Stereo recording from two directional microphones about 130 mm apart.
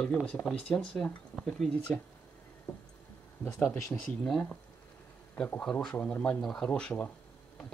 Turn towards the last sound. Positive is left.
turn(degrees=10)  # may be behind; listen again after turning